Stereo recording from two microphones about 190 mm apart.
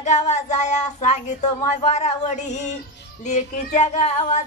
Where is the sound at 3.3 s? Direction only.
35° left (ahead or behind).